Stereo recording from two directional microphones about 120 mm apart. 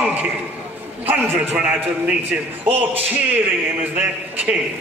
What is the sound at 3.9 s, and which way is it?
Speech, 15° right (ahead or behind).